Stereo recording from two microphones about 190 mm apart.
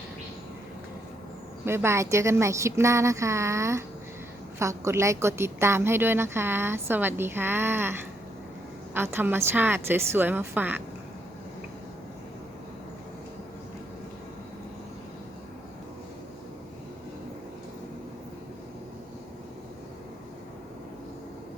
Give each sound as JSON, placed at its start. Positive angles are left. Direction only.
{"t": 1.6, "sound": "a woman's voice", "side_deg": -15}
{"t": 9.0, "sound": "a woman's voice", "side_deg": -10}